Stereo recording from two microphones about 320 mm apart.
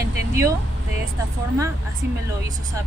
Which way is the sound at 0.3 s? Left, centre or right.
Centre.